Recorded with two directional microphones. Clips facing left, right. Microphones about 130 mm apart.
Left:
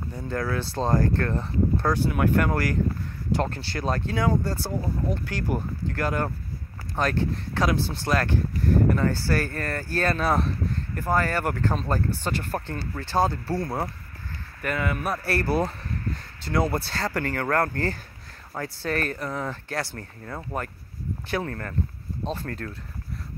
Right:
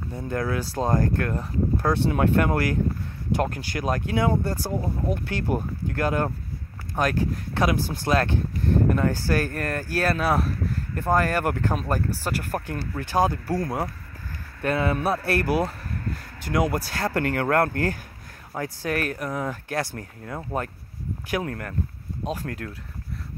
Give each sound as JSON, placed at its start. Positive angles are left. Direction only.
{"t": 0.1, "sound": "speech", "side_deg": -20}
{"t": 2.0, "sound": "speech", "side_deg": -25}
{"t": 11.0, "sound": "speech", "side_deg": -15}
{"t": 14.6, "sound": "speech", "side_deg": -30}
{"t": 15.3, "sound": "speech", "side_deg": -15}